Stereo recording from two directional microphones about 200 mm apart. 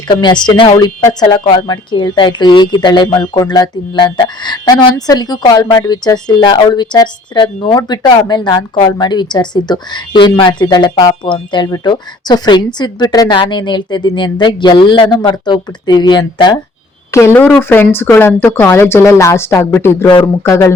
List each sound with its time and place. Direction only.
0.1 s speech: 25° left (ahead or behind)
20.1 s speech: 25° left (ahead or behind)
20.4 s speech: 15° left (ahead or behind)